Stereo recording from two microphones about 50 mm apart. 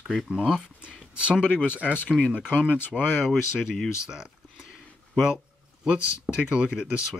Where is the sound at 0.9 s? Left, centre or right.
Right.